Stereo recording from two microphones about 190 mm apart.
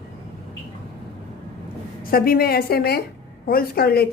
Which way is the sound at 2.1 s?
50° left (ahead or behind).